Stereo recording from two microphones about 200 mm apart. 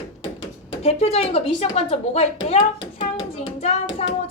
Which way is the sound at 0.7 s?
30° left (ahead or behind).